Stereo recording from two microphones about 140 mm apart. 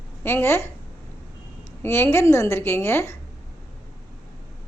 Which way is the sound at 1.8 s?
15° left (ahead or behind).